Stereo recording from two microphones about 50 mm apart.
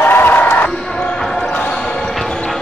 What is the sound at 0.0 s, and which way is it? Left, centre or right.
Music, left.